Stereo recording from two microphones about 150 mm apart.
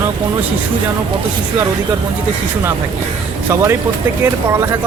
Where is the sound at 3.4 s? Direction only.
15° right (ahead or behind).